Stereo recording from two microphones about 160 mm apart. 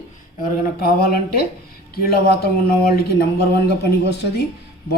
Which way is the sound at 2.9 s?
90° left.